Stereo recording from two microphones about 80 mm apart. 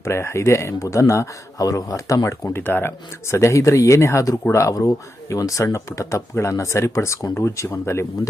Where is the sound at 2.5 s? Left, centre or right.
Left.